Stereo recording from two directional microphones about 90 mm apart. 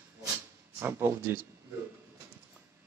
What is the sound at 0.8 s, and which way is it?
Speech, 25° right (ahead or behind).